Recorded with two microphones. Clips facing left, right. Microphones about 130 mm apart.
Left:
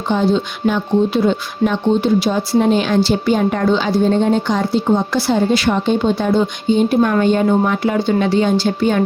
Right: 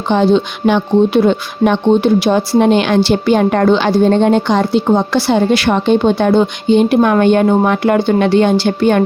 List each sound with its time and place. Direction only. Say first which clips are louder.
0.1 s speech: right 5 dB; 75° right (ahead or behind)